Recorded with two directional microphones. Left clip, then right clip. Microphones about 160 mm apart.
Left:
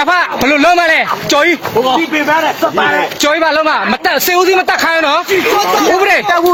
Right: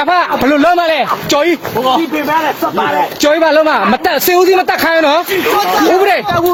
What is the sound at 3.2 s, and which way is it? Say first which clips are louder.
Speech: right 3 dB; 20° right (ahead or behind).